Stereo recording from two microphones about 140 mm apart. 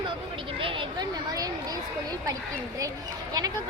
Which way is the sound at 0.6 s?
35° right (ahead or behind).